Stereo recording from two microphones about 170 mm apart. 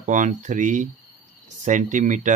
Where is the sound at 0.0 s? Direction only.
50° right (ahead or behind).